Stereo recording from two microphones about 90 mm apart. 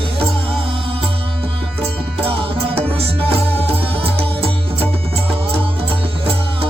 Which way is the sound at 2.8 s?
90° right.